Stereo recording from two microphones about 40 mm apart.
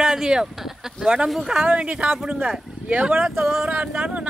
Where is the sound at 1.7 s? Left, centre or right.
Right.